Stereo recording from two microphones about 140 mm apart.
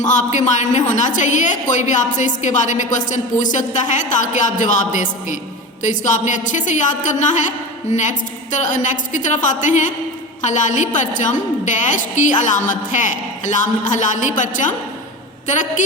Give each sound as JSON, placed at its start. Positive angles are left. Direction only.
{"t": 0.0, "sound": "a woman's voice", "side_deg": 60}